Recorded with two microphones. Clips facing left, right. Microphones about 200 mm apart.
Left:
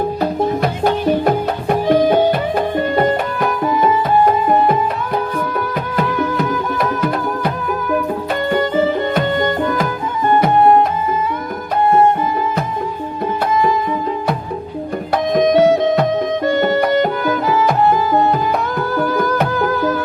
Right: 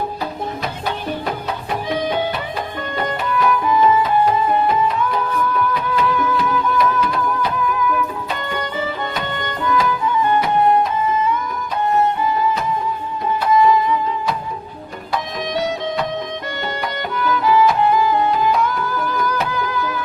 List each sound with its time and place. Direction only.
0.9 s music: 50° left (ahead or behind)
6.1 s music: 45° left (ahead or behind)
8.5 s music: 45° left (ahead or behind)
11.9 s music: 50° left (ahead or behind)
15.4 s music: 50° left (ahead or behind)